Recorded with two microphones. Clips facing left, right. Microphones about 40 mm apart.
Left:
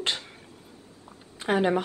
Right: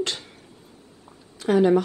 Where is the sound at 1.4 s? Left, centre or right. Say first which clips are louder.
Right 6 dB; left.